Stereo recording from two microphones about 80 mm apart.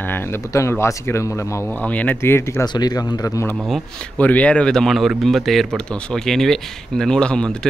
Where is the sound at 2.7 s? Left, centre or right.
Left.